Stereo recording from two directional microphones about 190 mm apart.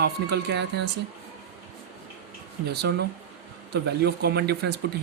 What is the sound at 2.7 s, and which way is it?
Speech, 60° right (ahead or behind).